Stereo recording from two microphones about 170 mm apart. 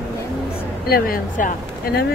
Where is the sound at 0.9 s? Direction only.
55° left (ahead or behind).